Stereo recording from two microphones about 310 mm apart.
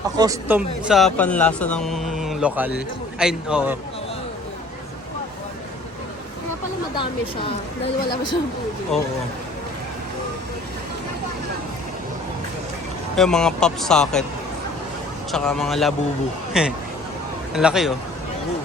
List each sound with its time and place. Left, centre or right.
0.2 s speech: centre
6.9 s a woman's voice: centre
8.9 s speech: centre
13.1 s speech: centre
15.3 s speech: centre